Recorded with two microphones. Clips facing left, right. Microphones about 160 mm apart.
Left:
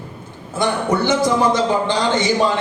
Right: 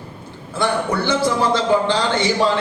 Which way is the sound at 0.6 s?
15° left (ahead or behind).